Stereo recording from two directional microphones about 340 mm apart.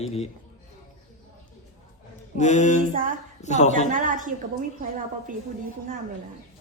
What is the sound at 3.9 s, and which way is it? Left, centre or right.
Speech, right.